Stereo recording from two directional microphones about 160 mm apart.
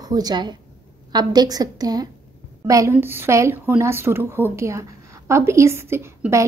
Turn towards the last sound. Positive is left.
turn(degrees=-15)  # may be behind; listen again after turning